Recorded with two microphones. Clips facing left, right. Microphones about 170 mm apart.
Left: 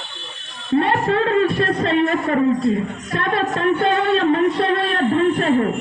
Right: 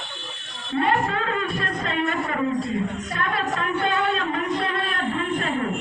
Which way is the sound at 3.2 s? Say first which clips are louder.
Left 7 dB; 30° left (ahead or behind).